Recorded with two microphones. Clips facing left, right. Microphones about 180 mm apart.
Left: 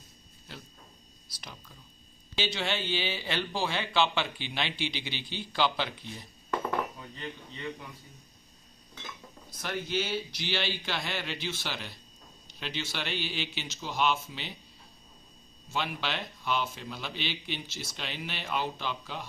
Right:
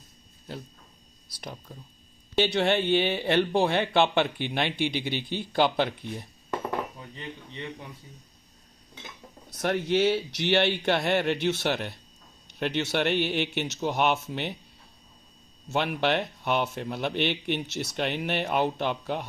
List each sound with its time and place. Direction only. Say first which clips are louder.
2.3 s speech: right 9 dB; 60° right (ahead or behind)
9.5 s a man's voice: right 9 dB; 70° right (ahead or behind)
15.7 s speech: right 8 dB; 60° right (ahead or behind)